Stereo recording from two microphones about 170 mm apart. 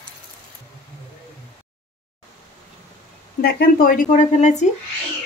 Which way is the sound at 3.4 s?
55° left (ahead or behind).